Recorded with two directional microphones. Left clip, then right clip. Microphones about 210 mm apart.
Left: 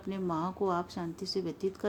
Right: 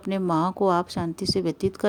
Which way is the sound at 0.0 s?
50° right (ahead or behind).